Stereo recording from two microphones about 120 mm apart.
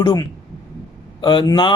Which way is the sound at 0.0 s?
35° left (ahead or behind).